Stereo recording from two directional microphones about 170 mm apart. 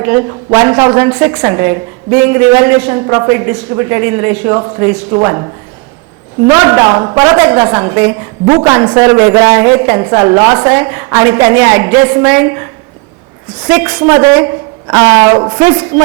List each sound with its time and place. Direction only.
0.0 s a woman's voice: 15° right (ahead or behind)
6.5 s a woman's voice: 20° right (ahead or behind)
13.7 s a woman's voice: 15° right (ahead or behind)